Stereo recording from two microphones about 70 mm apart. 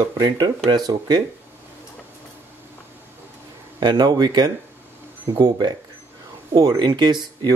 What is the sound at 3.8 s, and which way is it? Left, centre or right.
Speech, right.